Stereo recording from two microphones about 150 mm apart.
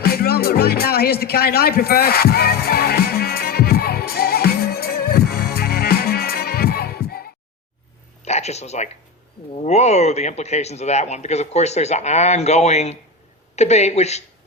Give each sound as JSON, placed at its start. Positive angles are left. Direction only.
{"t": 0.0, "sound": "music", "side_deg": 90}
{"t": 8.2, "sound": "a sound", "side_deg": 45}
{"t": 9.6, "sound": "a man's voice", "side_deg": 50}